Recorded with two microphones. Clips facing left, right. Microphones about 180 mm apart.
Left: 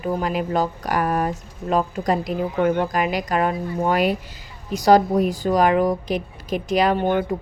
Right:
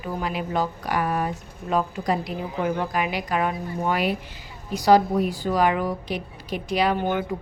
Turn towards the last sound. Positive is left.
turn(degrees=55)  # may be behind; listen again after turning